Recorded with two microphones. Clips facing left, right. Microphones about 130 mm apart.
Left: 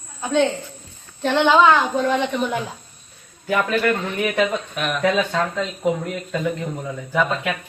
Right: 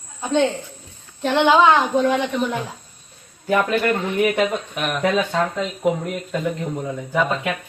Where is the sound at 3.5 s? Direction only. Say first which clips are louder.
Right 1 dB; 25° right (ahead or behind).